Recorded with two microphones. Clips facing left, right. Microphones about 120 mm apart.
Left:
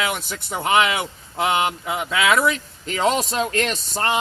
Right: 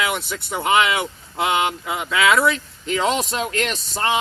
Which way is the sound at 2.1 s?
25° left (ahead or behind).